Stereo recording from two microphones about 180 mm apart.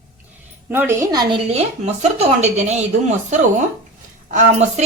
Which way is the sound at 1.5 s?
40° right (ahead or behind).